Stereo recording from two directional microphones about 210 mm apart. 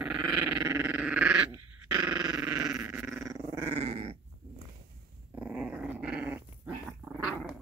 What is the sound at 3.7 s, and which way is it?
Dog, 25° right (ahead or behind).